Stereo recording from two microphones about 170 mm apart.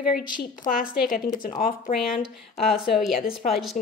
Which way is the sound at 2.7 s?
Centre (ahead or behind).